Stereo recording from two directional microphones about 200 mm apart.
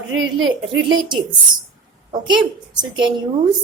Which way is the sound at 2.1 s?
25° right (ahead or behind).